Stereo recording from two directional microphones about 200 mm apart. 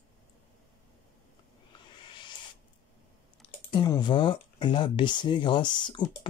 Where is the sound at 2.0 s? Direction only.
25° left (ahead or behind).